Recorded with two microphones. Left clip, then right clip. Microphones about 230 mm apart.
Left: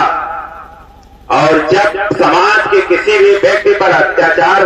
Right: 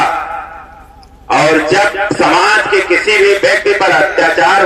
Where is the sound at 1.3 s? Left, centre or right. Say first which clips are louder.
Even; right.